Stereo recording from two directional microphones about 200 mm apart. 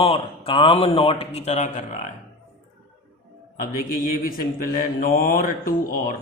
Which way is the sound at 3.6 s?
45° left (ahead or behind).